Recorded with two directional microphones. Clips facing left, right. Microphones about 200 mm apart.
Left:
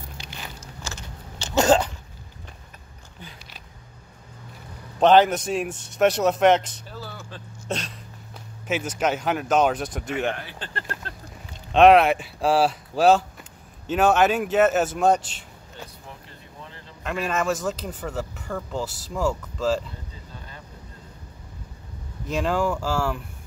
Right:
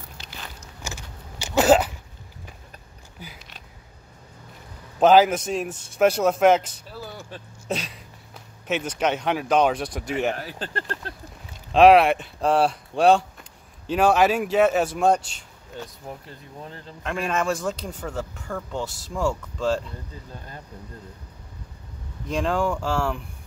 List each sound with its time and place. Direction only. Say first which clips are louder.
0.8 s a sound: right 2 dB; 15° right (ahead or behind)
5.0 s speech: even; 5° right (ahead or behind)
7.6 s a sound: right 1 dB; centre (ahead or behind)
8.6 s speech: even; 5° left (ahead or behind)
10.3 s speech: right 4 dB; 40° right (ahead or behind)
11.7 s speech: even; centre (ahead or behind)
17.0 s speech: even; centre (ahead or behind)
22.3 s speech: even; 5° left (ahead or behind)